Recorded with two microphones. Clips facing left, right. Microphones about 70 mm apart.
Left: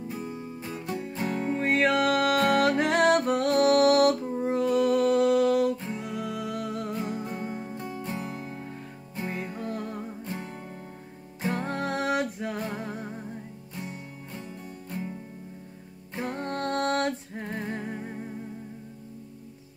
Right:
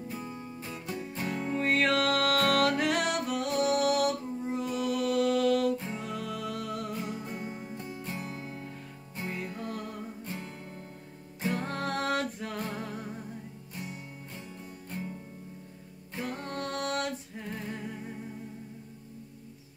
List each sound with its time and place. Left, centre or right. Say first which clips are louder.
1.2 s music: left 3 dB; left
5.2 s a sound: left 4 dB; left
5.9 s music: left 3 dB; left
7.1 s music: left 4 dB; left
7.5 s music: left 5 dB; left
8.1 s music: left 4 dB; left
16.2 s music: left 4 dB; left